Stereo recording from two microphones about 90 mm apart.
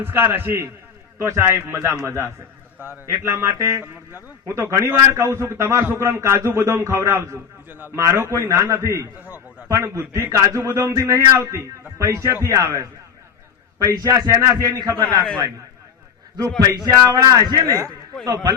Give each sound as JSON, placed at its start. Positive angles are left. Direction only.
{"t": 0.0, "sound": "a man's voice", "side_deg": -25}
{"t": 2.7, "sound": "a man's voice", "side_deg": -20}
{"t": 3.1, "sound": "a man's voice", "side_deg": -30}
{"t": 14.6, "sound": "speech", "side_deg": -50}
{"t": 16.6, "sound": "a man's voice", "side_deg": -45}